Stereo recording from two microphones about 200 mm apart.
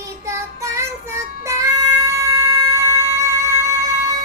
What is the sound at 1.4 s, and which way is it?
Music, 15° right (ahead or behind).